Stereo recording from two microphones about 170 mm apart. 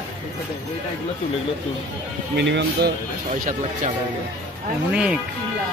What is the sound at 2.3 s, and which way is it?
Speech, 85° right.